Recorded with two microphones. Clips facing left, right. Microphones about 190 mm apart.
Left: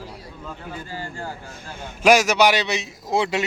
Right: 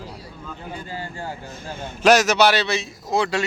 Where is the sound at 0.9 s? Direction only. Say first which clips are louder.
Even; 15° right (ahead or behind).